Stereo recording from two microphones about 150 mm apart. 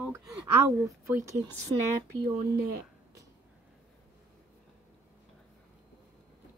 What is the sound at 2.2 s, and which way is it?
Speech, 90° right.